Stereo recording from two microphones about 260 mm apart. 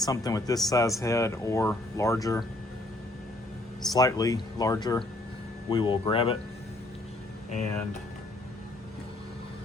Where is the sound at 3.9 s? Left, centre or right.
Centre.